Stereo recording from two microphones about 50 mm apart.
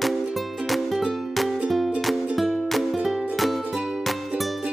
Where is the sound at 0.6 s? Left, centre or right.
Centre.